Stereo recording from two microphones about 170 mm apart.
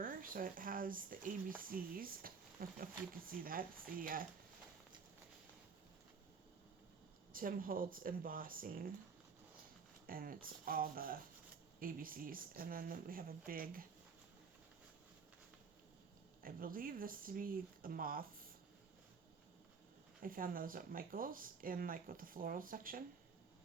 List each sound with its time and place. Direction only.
0.0 s speech: 55° right (ahead or behind)
7.3 s speech: 55° right (ahead or behind)
10.1 s speech: 55° right (ahead or behind)
16.4 s speech: 55° right (ahead or behind)
20.2 s speech: 55° right (ahead or behind)